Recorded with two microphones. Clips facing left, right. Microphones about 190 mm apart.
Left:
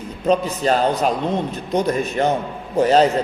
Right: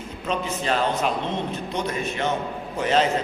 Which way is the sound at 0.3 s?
40° left (ahead or behind).